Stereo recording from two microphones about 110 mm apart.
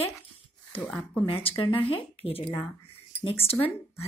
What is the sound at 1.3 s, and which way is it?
A woman's voice, 60° left (ahead or behind).